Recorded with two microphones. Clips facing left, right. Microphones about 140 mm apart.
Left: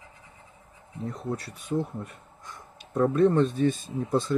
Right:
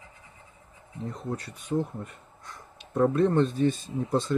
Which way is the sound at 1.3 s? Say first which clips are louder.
Even; centre (ahead or behind).